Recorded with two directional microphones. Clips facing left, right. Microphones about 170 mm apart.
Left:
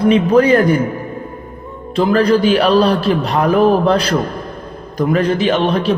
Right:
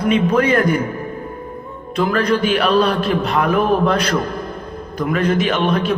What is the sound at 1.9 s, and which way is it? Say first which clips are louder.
A man's voice: left 5 dB; 35° left (ahead or behind).